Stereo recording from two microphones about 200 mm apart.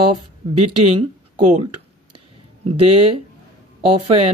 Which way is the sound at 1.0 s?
30° right (ahead or behind).